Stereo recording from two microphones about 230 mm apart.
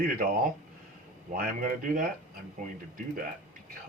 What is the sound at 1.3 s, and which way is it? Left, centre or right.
Speech, right.